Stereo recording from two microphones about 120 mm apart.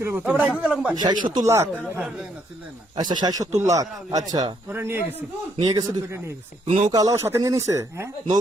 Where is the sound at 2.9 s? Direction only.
35° right (ahead or behind).